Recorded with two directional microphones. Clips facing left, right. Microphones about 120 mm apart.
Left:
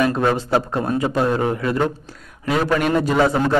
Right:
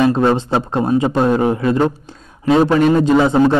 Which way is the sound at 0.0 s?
25° right (ahead or behind).